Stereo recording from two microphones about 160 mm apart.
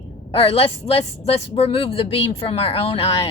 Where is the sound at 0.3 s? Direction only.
35° left (ahead or behind).